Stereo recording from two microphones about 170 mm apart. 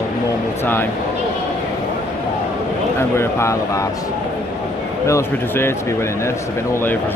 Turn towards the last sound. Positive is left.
turn(degrees=15)  # may be behind; listen again after turning